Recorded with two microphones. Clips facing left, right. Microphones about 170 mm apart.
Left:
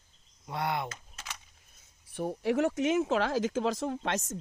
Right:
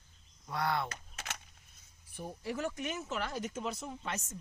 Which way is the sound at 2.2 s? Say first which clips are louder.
Left 10 dB; 70° left (ahead or behind).